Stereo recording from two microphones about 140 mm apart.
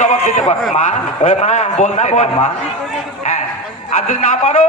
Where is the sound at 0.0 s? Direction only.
65° left (ahead or behind).